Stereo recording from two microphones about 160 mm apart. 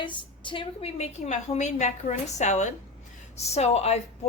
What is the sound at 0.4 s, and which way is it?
A woman's voice, 30° left (ahead or behind).